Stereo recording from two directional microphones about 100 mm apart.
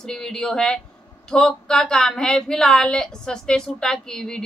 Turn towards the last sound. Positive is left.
turn(degrees=5)  # may be behind; listen again after turning